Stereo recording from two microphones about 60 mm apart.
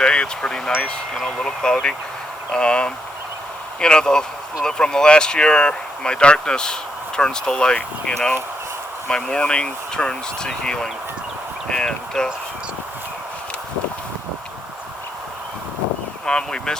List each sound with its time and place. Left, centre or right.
0.0 s speech: centre
9.0 s speech: centre
16.2 s speech: centre